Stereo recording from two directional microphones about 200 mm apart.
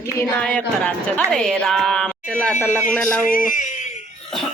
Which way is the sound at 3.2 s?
40° left (ahead or behind).